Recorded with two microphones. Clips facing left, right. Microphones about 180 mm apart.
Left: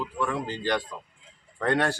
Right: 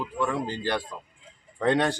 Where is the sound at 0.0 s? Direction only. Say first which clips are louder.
Right 1 dB; 15° right (ahead or behind).